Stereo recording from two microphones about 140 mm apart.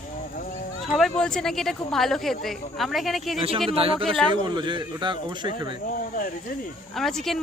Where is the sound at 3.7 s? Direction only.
45° right (ahead or behind).